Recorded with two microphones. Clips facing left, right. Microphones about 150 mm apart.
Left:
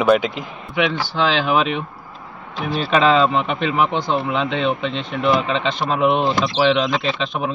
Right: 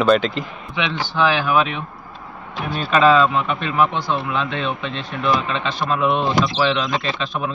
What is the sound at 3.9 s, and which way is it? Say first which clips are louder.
Speech: left 2 dB; 25° left (ahead or behind).